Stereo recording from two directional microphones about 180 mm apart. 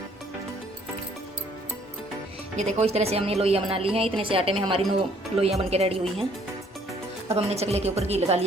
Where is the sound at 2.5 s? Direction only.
40° right (ahead or behind).